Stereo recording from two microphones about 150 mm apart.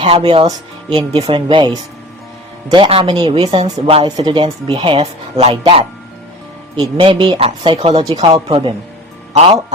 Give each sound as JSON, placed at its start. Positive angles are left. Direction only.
{"t": 0.0, "sound": "speech", "side_deg": -40}
{"t": 8.1, "sound": "speech", "side_deg": -30}